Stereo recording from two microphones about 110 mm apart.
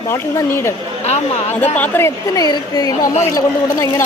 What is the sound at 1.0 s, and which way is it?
Speech, 85° left.